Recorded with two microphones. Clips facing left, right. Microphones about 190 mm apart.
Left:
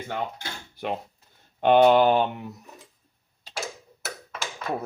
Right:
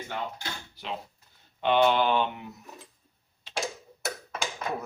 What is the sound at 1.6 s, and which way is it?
Speech, 45° left (ahead or behind).